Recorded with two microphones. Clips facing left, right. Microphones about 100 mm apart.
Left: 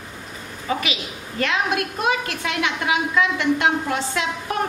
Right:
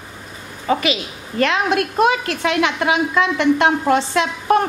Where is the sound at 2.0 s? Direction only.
75° right (ahead or behind).